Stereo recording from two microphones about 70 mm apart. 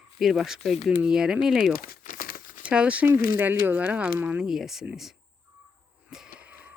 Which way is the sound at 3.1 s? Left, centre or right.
Right.